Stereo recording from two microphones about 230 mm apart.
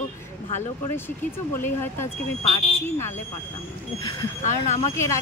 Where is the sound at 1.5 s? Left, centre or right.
Centre.